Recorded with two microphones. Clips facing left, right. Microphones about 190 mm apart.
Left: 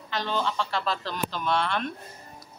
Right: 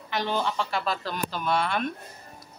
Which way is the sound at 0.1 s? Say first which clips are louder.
Right 1 dB; 15° right (ahead or behind).